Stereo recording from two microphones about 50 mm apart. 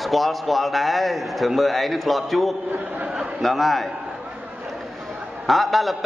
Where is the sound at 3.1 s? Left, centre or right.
Centre.